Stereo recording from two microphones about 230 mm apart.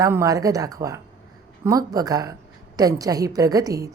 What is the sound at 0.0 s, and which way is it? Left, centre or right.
A woman's voice, centre.